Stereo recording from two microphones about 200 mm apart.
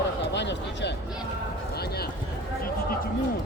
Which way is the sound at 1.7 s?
50° left (ahead or behind).